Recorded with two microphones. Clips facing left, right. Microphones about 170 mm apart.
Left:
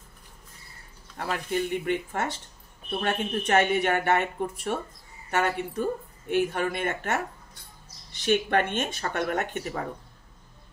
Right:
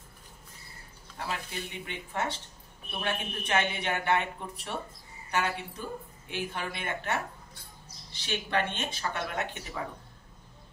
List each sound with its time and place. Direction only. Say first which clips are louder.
1.1 s a woman's voice: left 8 dB; 55° left (ahead or behind)